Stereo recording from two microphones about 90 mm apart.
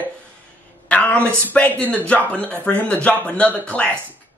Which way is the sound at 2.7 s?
20° left (ahead or behind).